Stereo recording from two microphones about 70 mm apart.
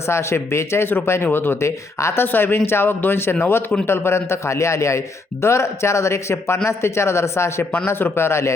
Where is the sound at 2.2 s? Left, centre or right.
Left.